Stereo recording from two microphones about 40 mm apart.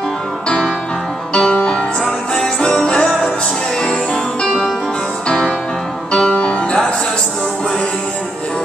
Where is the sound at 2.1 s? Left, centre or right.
Left.